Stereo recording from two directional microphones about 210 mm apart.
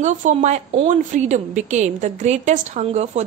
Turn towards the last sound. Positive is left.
turn(degrees=-30)  # may be behind; listen again after turning